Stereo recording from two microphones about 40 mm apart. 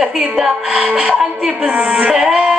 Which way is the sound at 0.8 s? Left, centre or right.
Right.